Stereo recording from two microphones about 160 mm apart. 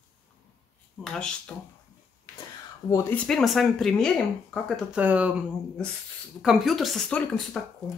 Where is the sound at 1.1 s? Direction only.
5° left (ahead or behind).